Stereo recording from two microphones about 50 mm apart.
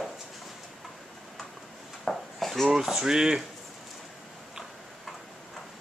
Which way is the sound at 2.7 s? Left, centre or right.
Centre.